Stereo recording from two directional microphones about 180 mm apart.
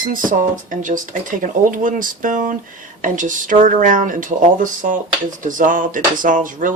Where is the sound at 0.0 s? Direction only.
50° right (ahead or behind).